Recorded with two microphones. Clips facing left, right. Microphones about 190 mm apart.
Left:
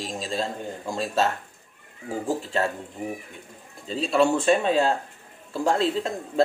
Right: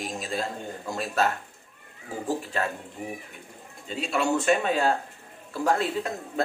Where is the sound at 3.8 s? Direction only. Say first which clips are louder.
Left 6 dB; 35° left (ahead or behind).